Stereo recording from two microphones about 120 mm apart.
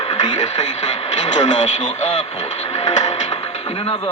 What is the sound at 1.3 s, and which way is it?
Speech, 90° left.